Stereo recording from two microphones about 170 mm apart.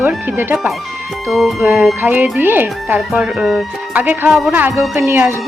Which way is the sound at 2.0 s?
10° right (ahead or behind).